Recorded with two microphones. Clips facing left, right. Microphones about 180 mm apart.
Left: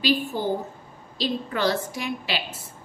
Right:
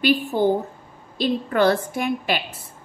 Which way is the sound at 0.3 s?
55° right (ahead or behind).